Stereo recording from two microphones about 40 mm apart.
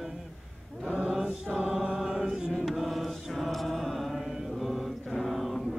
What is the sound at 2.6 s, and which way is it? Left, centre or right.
Mantra, centre.